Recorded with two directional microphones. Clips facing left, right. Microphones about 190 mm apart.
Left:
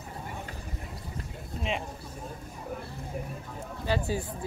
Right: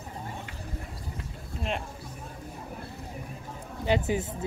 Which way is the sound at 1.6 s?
Centre (ahead or behind).